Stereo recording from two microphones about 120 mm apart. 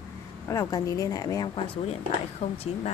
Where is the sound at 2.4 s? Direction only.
60° left (ahead or behind).